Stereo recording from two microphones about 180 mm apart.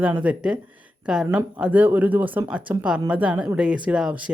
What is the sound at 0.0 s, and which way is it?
Speech, 10° right (ahead or behind).